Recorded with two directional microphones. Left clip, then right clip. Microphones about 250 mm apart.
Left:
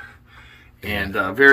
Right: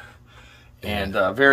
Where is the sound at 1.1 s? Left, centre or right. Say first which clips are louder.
Left 3 dB; centre.